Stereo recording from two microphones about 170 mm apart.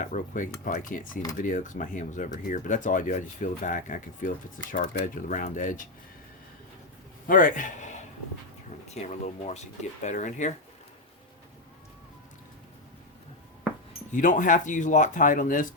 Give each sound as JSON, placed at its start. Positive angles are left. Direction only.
{"t": 0.0, "sound": "speech", "side_deg": 45}
{"t": 7.3, "sound": "a man's voice", "side_deg": 50}
{"t": 14.1, "sound": "speech", "side_deg": 50}